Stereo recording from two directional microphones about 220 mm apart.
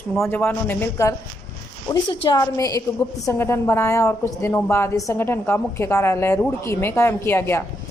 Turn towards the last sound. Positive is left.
turn(degrees=10)  # may be behind; listen again after turning